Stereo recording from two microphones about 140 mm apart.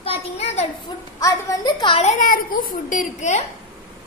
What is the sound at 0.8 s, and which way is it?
Speech, 30° left (ahead or behind).